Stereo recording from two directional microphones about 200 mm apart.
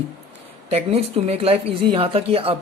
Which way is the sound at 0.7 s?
30° right (ahead or behind).